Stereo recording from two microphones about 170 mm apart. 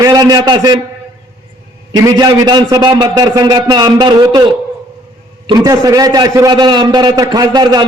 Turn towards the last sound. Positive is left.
turn(degrees=-25)  # may be behind; listen again after turning